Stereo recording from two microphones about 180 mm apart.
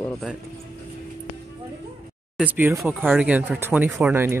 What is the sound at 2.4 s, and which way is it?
Speech, 10° right (ahead or behind).